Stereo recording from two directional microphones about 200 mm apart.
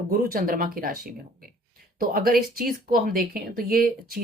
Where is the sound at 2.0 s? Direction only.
45° right (ahead or behind).